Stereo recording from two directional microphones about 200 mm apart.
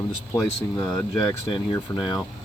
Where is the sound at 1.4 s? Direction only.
25° left (ahead or behind).